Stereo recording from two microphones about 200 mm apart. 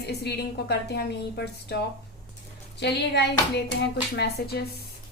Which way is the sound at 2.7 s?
60° left (ahead or behind).